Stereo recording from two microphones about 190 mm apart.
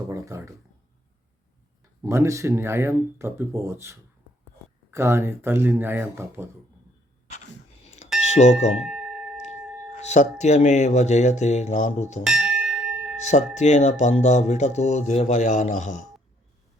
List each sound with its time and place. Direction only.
0.1 s a sound: 15° right (ahead or behind)
2.0 s speech: 15° right (ahead or behind)
7.9 s a sound: 35° left (ahead or behind)
8.3 s speech: 35° left (ahead or behind)
8.8 s tuning fork: 5° right (ahead or behind)
9.6 s a sound: 5° right (ahead or behind)
10.0 s speech: 35° left (ahead or behind)
12.2 s bell: 5° right (ahead or behind)
13.2 s speech: 40° left (ahead or behind)